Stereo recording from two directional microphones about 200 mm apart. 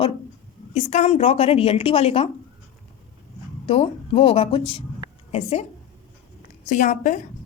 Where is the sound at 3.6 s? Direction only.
30° left (ahead or behind).